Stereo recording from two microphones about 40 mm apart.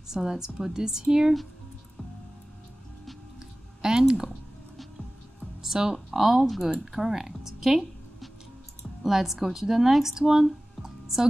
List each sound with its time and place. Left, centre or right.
0.1 s speech: centre
3.8 s speech: centre
5.6 s music: centre
6.0 s speech: centre
6.7 s speech: centre
9.0 s speech: centre
10.8 s music: centre